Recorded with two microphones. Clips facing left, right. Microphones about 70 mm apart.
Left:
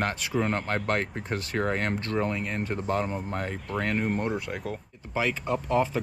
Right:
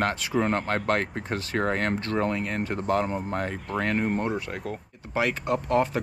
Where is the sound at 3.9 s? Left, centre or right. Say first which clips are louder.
Right 2 dB; centre.